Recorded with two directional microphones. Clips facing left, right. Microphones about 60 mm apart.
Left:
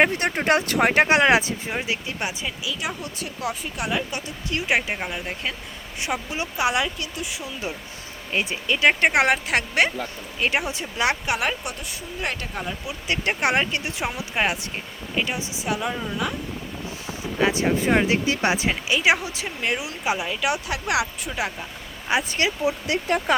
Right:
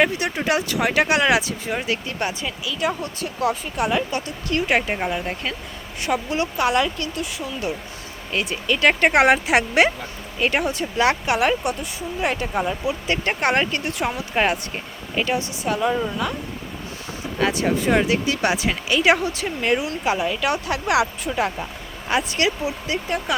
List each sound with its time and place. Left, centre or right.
0.1 s speech: left
1.7 s speech: centre
8.9 s speech: centre
10.4 s speech: centre
12.9 s speech: centre
17.4 s speech: left
18.7 s speech: centre
22.3 s speech: left